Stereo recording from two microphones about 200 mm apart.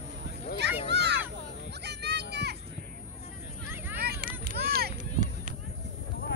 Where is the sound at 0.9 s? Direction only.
55° right (ahead or behind).